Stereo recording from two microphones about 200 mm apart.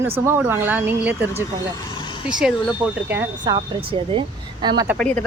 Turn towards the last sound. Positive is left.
turn(degrees=5)  # may be behind; listen again after turning